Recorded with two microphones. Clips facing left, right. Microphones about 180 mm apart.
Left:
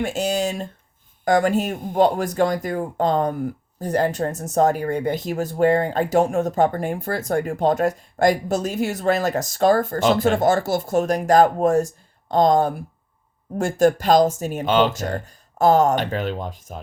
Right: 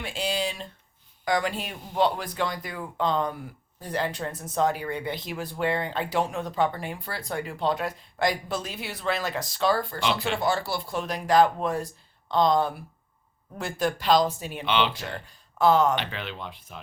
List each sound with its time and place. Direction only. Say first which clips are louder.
0.0 s speech: left 7 dB; 45° left (ahead or behind)